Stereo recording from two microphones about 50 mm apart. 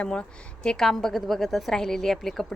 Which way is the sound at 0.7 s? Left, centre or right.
Centre.